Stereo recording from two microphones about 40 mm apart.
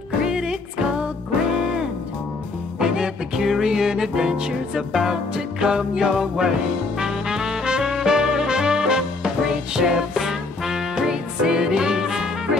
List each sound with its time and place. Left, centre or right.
0.2 s music: centre